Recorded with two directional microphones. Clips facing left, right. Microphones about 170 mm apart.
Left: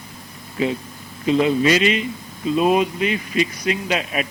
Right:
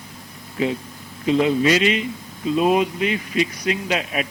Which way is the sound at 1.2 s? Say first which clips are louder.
Left 1 dB; 10° left (ahead or behind).